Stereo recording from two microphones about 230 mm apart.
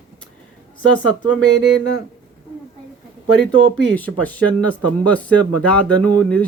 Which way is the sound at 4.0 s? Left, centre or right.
Centre.